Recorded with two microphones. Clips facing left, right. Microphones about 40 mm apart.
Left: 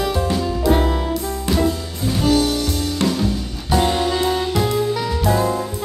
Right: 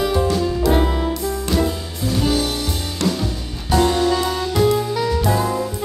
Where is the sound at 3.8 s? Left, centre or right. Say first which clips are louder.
Right 2 dB; centre.